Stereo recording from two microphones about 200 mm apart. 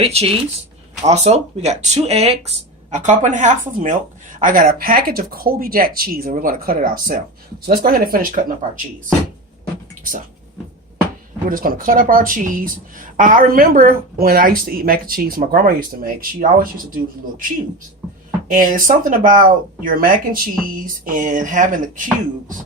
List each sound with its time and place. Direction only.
0.0 s a woman's voice: 30° right (ahead or behind)
11.4 s a woman's voice: 45° right (ahead or behind)
18.5 s a woman's voice: 45° right (ahead or behind)